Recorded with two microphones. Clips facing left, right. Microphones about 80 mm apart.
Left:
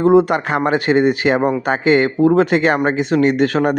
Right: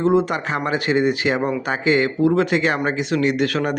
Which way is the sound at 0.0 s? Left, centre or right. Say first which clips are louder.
Left 6 dB; left.